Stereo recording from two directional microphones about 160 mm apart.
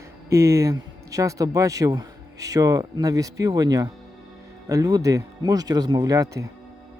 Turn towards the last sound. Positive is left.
turn(degrees=-20)  # may be behind; listen again after turning